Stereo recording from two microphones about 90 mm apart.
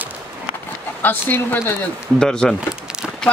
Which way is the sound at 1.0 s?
25° left (ahead or behind).